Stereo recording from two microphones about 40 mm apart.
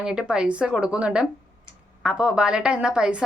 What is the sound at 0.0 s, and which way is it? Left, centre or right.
A woman's voice, centre.